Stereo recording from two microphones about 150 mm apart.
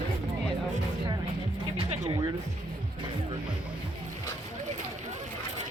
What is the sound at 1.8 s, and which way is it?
Music, 35° right (ahead or behind).